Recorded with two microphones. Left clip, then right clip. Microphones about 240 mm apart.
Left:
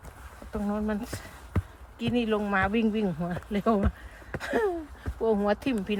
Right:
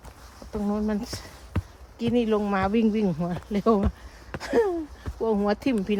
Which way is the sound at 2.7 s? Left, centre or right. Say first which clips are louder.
Right 3 dB; right.